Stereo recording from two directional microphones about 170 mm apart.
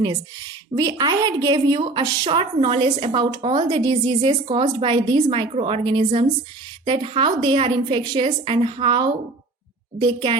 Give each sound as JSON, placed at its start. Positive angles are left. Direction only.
{"t": 0.8, "sound": "a woman's voice", "side_deg": -25}